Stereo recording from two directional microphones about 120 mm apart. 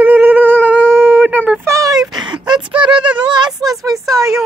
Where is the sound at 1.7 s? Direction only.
30° right (ahead or behind).